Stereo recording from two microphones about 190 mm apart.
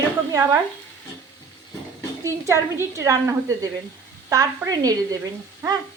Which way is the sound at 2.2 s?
15° right (ahead or behind).